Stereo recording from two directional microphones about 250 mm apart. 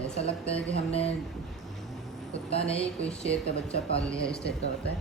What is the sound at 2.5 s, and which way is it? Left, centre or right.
Speech, left.